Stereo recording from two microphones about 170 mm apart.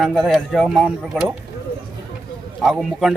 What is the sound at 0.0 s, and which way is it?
Speech, centre (ahead or behind).